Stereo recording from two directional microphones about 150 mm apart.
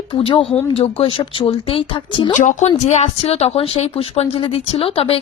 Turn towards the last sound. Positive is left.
turn(degrees=40)  # may be behind; listen again after turning